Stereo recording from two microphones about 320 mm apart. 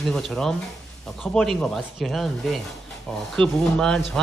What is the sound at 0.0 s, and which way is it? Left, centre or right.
Speech, centre.